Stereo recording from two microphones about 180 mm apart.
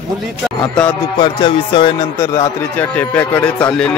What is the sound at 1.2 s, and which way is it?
Music, 30° left (ahead or behind).